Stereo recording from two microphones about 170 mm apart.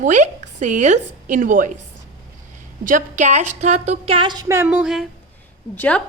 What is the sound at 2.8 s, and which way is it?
A woman's voice, 50° right (ahead or behind).